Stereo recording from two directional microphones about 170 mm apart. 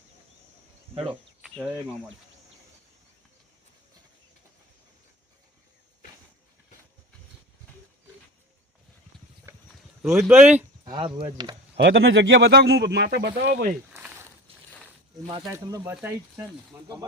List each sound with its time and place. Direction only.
1.4 s cricket: 5° right (ahead or behind)
9.5 s livestock: 15° right (ahead or behind)
10.0 s speech: centre (ahead or behind)
10.9 s speech: 30° right (ahead or behind)
11.9 s speech: 80° right
13.9 s a sound: 10° right (ahead or behind)
14.5 s boat: 35° right (ahead or behind)
15.3 s speech: 25° right (ahead or behind)